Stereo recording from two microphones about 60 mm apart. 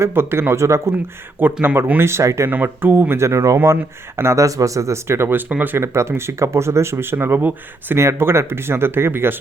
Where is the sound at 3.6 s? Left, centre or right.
Right.